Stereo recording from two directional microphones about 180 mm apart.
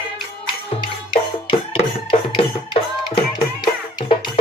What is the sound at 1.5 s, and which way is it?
Music, 30° left (ahead or behind).